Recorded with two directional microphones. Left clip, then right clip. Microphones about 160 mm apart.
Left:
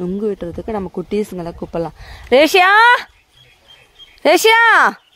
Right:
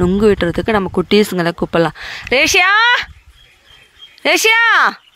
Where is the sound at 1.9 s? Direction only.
5° right (ahead or behind).